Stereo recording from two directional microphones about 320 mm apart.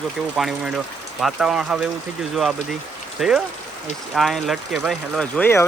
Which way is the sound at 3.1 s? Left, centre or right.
Centre.